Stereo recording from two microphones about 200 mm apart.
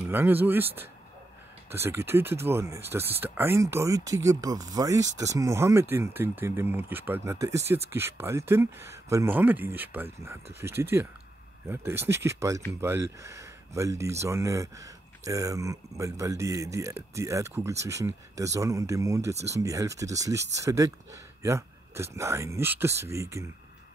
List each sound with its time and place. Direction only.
0.1 s speech: 10° right (ahead or behind)
1.7 s speech: 10° right (ahead or behind)